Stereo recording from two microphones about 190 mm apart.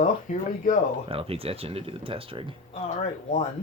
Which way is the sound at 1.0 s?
30° right (ahead or behind).